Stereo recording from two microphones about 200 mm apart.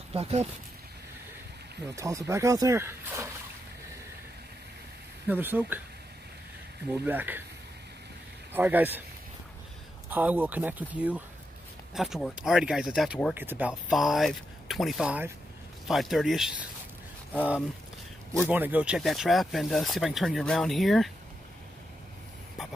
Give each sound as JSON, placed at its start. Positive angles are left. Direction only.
{"t": 0.1, "sound": "speech", "side_deg": -30}
{"t": 2.0, "sound": "speech", "side_deg": -15}
{"t": 5.3, "sound": "speech", "side_deg": -10}
{"t": 6.9, "sound": "speech", "side_deg": -10}
{"t": 8.5, "sound": "speech", "side_deg": -10}
{"t": 10.0, "sound": "speech", "side_deg": -10}
{"t": 18.3, "sound": "speech", "side_deg": -10}